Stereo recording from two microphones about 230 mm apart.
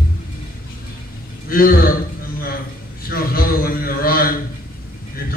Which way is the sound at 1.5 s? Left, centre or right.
Left.